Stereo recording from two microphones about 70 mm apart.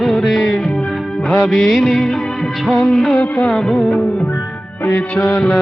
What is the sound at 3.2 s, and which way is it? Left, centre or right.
Music, left.